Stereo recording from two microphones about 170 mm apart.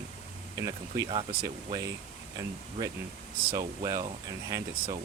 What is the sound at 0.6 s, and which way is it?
Speech, 25° right (ahead or behind).